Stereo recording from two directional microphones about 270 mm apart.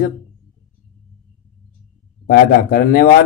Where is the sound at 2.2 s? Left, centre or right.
Left.